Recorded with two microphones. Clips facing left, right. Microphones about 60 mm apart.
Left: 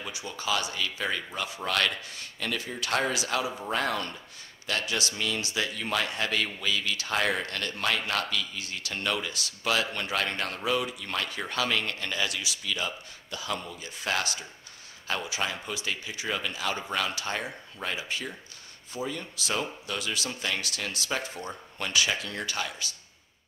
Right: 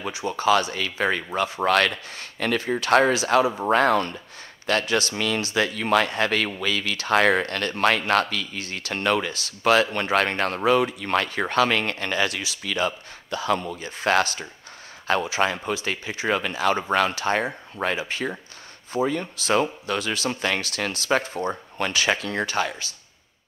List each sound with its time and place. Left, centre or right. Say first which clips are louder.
0.1 s speech: right 11 dB; right
5.1 s speech: right 6 dB; right
5.4 s speech: right 7 dB; right